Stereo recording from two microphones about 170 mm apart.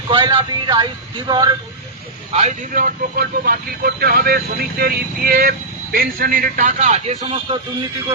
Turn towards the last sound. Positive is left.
turn(degrees=-35)  # may be behind; listen again after turning